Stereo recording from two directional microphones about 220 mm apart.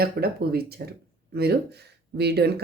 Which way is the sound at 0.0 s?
45° right (ahead or behind).